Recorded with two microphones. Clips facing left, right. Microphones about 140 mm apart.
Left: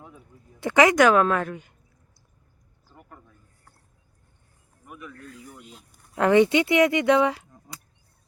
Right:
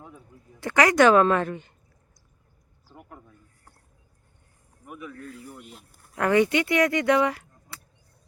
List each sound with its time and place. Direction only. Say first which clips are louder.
0.6 s speech: left 3 dB; 20° left (ahead or behind)
0.9 s a woman's voice: right 1 dB; 5° left (ahead or behind)
2.9 s a sound: right 3 dB; 10° right (ahead or behind)
4.9 s a woman's voice: right 3 dB; 5° right (ahead or behind)
6.1 s speech: left 3 dB; 20° left (ahead or behind)